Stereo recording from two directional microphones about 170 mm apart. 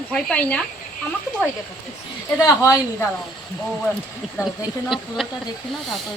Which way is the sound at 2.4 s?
15° left (ahead or behind).